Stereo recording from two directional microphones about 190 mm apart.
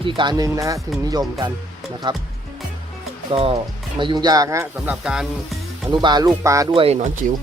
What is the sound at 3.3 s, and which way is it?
A man's voice, 30° right (ahead or behind).